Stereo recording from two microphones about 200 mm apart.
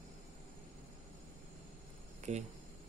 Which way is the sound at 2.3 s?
35° right (ahead or behind).